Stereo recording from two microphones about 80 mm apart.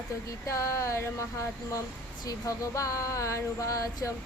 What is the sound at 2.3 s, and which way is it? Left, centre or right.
Female singing, left.